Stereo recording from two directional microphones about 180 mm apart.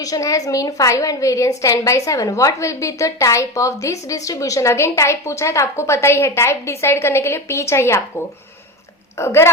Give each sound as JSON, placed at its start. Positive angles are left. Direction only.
{"t": 0.0, "sound": "a woman's voice", "side_deg": 20}
{"t": 9.1, "sound": "a woman's voice", "side_deg": 15}